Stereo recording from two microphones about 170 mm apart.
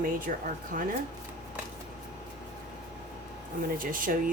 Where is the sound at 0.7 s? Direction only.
55° right (ahead or behind).